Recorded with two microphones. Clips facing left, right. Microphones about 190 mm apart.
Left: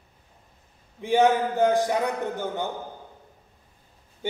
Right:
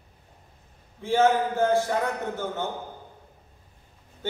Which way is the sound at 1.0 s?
15° left (ahead or behind).